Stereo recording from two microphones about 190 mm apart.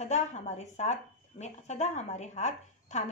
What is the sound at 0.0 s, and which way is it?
Speech, 35° left (ahead or behind).